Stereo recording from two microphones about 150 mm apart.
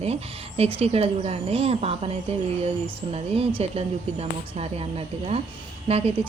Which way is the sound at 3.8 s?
45° right (ahead or behind).